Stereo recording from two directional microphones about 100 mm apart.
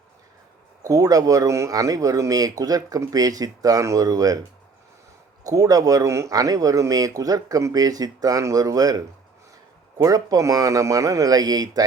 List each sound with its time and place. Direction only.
0.8 s speech: 35° right (ahead or behind)
5.4 s speech: 35° right (ahead or behind)
10.0 s speech: 35° right (ahead or behind)